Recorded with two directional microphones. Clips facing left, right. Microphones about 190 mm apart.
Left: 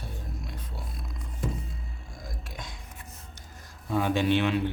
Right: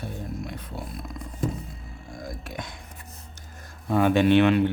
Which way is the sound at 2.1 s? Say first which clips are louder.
Right 7 dB; 55° right (ahead or behind).